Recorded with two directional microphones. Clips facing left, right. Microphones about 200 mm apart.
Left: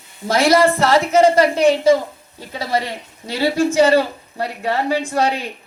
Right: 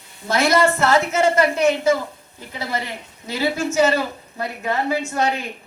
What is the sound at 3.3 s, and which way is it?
A woman's voice, 30° left (ahead or behind).